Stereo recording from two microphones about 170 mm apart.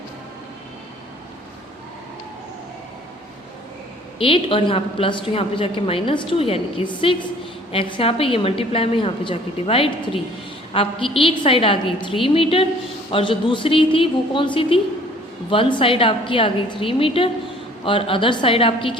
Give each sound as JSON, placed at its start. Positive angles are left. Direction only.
{"t": 4.2, "sound": "a woman's voice", "side_deg": 30}